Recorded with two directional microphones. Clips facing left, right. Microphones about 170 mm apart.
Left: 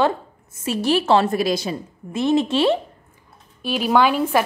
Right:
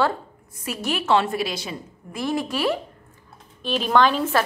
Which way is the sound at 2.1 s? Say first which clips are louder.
Left 7 dB; 25° left (ahead or behind).